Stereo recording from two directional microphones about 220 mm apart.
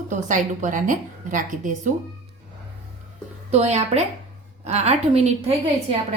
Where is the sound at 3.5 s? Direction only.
30° right (ahead or behind).